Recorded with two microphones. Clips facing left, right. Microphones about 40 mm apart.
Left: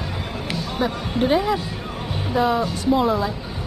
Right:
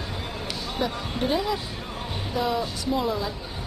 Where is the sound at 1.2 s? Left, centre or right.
Left.